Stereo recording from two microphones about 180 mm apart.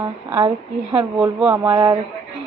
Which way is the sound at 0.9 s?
5° right (ahead or behind).